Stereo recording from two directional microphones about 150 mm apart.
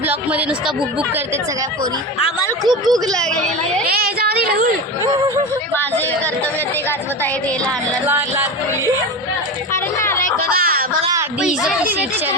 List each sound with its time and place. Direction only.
0.1 s speech: 10° right (ahead or behind)
2.6 s speech: 30° right (ahead or behind)
3.1 s a woman's voice: 5° left (ahead or behind)
3.8 s speech: 90° right
8.0 s speech: 15° right (ahead or behind)
10.5 s music: 80° right